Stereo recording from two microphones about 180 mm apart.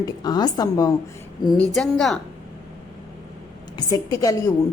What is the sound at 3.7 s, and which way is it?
Speech, 20° left (ahead or behind).